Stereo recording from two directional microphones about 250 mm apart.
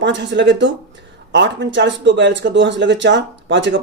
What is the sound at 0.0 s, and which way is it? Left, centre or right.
Speech, right.